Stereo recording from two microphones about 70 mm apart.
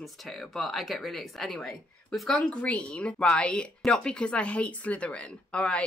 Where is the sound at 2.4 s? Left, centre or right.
Centre.